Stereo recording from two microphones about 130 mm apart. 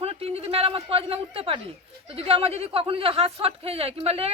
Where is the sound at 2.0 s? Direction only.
50° right (ahead or behind).